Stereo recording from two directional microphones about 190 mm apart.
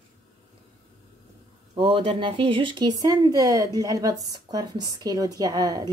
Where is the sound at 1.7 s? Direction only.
30° right (ahead or behind).